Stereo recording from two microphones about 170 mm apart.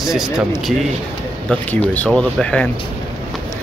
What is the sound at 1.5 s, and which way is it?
Speech, 10° left (ahead or behind).